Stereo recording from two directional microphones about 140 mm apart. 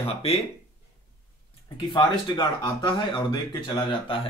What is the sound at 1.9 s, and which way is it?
Speech, 30° left (ahead or behind).